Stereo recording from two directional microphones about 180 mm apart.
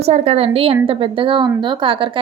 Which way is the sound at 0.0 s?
35° right (ahead or behind).